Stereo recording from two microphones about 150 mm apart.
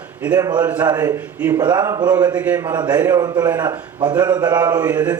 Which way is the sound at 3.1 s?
25° right (ahead or behind).